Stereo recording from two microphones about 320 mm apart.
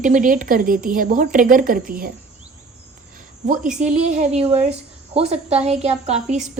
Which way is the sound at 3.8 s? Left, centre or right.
Right.